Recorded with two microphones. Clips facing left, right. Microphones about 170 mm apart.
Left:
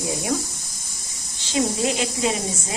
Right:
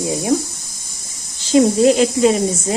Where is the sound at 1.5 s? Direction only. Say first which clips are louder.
Right 11 dB; 50° right (ahead or behind).